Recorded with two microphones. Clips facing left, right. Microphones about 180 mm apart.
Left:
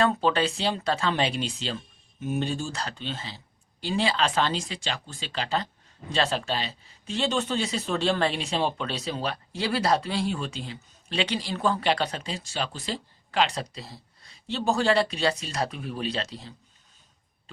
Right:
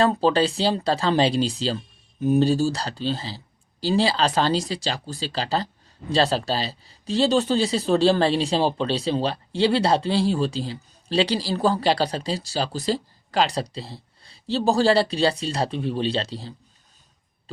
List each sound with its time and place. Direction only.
0.0 s speech: 35° right (ahead or behind)